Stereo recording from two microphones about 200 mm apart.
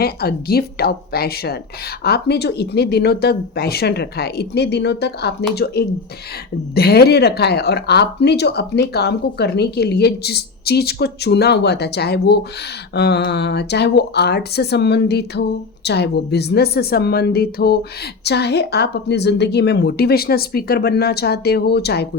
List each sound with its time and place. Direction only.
0.0 s a woman's voice: 50° left (ahead or behind)